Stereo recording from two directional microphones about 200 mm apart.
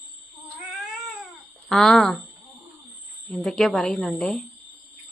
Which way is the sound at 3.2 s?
5° left (ahead or behind).